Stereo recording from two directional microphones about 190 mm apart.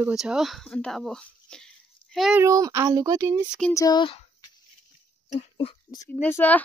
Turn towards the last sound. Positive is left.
turn(degrees=10)  # may be behind; listen again after turning